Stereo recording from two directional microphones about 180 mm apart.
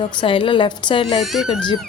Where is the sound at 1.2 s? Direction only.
Centre (ahead or behind).